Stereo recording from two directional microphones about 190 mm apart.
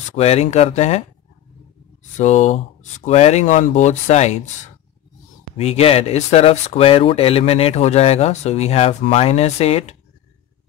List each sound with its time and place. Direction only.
0.1 s speech: 35° left (ahead or behind)
2.1 s speech: 40° left (ahead or behind)
5.6 s speech: 35° left (ahead or behind)